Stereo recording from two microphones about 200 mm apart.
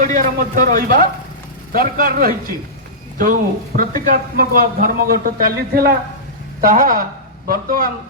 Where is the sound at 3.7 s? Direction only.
45° right (ahead or behind).